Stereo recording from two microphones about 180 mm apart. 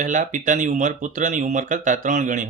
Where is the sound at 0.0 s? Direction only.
45° right (ahead or behind).